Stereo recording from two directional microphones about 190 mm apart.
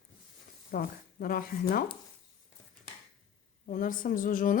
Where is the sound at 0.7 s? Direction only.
50° left (ahead or behind).